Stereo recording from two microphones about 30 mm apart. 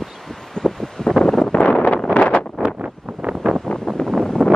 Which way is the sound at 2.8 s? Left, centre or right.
Right.